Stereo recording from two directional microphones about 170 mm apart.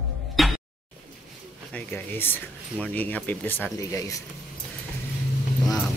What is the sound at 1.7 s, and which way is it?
Speech, 10° left (ahead or behind).